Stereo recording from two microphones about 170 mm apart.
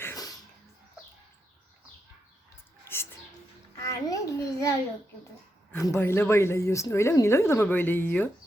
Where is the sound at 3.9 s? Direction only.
20° left (ahead or behind).